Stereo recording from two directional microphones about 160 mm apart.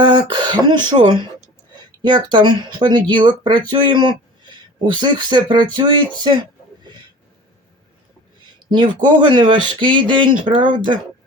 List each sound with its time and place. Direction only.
0.0 s speech: 30° right (ahead or behind)
8.4 s speech: 30° right (ahead or behind)